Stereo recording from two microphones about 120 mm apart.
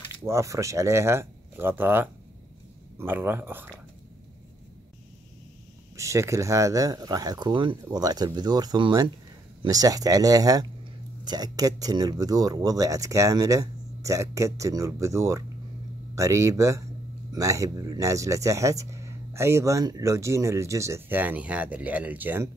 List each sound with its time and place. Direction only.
0.2 s speech: 25° right (ahead or behind)
5.9 s speech: 25° right (ahead or behind)